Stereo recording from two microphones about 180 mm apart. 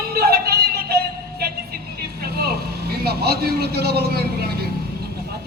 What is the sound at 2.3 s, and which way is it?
Speech, 60° right (ahead or behind).